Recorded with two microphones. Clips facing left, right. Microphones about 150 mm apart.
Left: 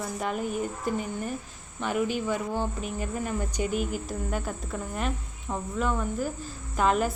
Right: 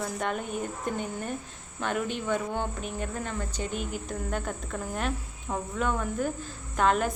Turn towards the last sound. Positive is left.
turn(degrees=5)  # may be behind; listen again after turning